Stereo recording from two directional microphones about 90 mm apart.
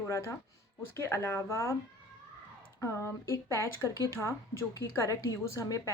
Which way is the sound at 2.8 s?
30° left (ahead or behind).